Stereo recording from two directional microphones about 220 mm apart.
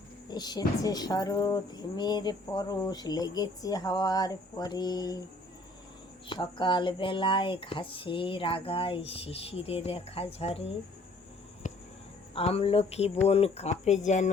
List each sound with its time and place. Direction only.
0.3 s speech: 20° left (ahead or behind)
6.2 s speech: 20° left (ahead or behind)
11.6 s a sound: 35° left (ahead or behind)
12.3 s speech: 25° left (ahead or behind)